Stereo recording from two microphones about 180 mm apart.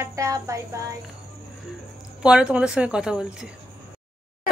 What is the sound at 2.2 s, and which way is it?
A woman's voice, 5° right (ahead or behind).